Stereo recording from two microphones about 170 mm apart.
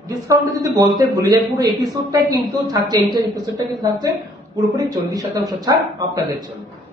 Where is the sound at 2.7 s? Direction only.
20° right (ahead or behind).